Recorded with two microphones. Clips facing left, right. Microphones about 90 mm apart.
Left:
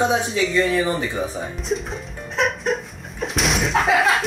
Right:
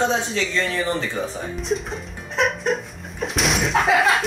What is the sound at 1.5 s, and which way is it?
Music, centre (ahead or behind).